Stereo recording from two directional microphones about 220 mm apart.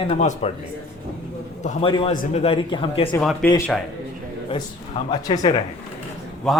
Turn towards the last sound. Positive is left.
turn(degrees=0)  # may be behind; listen again after turning